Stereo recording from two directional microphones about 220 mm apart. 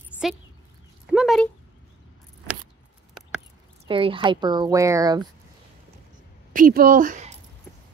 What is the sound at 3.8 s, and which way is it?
A woman's voice, 25° right (ahead or behind).